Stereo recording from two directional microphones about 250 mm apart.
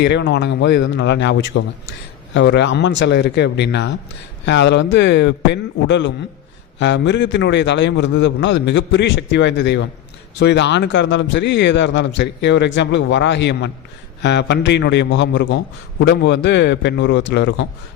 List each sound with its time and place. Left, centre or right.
0.0 s a man's voice: left